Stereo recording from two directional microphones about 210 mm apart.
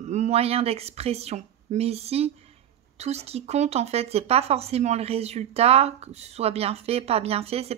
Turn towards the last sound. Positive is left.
turn(degrees=-30)  # may be behind; listen again after turning